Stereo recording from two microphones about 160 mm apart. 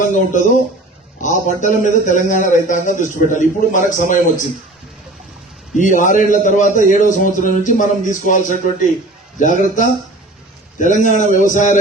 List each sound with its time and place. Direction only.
0.1 s speech: 50° left (ahead or behind)
5.7 s speech: 55° left (ahead or behind)